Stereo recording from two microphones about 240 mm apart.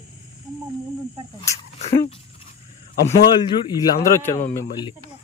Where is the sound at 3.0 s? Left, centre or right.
Centre.